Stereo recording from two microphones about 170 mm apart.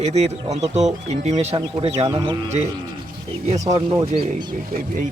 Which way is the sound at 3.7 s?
30° right (ahead or behind).